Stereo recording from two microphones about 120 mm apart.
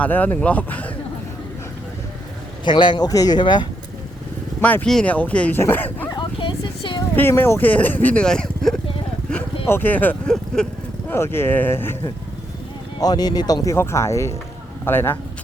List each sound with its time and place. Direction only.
0.0 s speech: 15° left (ahead or behind)
2.6 s speech: 40° left (ahead or behind)
3.1 s speech: 30° left (ahead or behind)
4.6 s speech: 10° left (ahead or behind)
6.1 s a sound: 40° left (ahead or behind)
7.2 s speech: 20° left (ahead or behind)
9.6 s speech: 15° left (ahead or behind)
10.3 s vehicle: 5° left (ahead or behind)
11.1 s speech: 20° left (ahead or behind)
13.0 s speech: 35° left (ahead or behind)